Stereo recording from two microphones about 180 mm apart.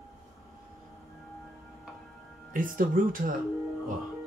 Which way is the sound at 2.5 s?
50° right (ahead or behind).